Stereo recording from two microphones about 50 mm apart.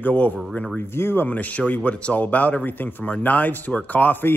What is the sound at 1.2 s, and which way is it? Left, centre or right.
Speech, left.